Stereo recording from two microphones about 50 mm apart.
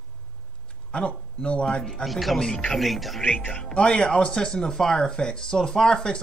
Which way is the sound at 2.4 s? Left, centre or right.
Centre.